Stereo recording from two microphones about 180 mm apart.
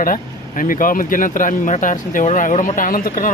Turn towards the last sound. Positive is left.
turn(degrees=50)  # may be behind; listen again after turning